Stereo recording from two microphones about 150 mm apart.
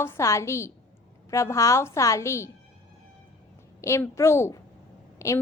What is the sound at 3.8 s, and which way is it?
A woman's voice, 20° left (ahead or behind).